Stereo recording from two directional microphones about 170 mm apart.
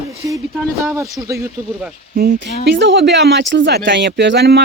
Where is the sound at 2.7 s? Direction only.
90° right.